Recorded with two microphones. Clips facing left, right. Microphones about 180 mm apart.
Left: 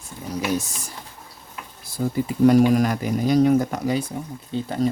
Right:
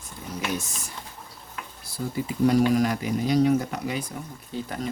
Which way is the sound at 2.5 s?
50° left (ahead or behind).